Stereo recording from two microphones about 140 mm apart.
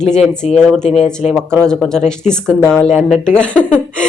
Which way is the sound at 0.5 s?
5° left (ahead or behind).